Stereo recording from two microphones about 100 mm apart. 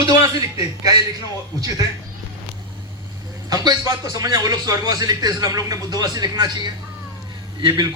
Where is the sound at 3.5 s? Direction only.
40° right (ahead or behind).